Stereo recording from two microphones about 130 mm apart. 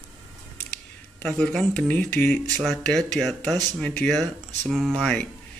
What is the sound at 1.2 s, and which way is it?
Speech, 5° left (ahead or behind).